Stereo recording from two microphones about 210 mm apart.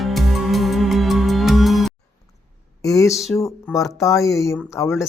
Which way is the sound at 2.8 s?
15° left (ahead or behind).